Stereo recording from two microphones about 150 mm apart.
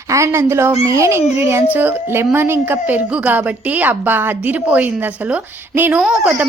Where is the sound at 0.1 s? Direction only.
20° right (ahead or behind).